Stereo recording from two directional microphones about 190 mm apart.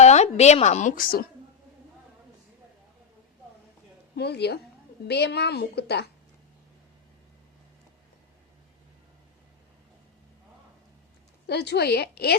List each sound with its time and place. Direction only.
0.0 s a woman's voice: 35° left (ahead or behind)
4.1 s a woman's voice: 60° left (ahead or behind)
11.4 s a woman's voice: 60° left (ahead or behind)